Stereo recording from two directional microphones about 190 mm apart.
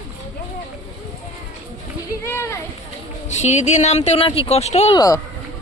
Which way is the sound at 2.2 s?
15° left (ahead or behind).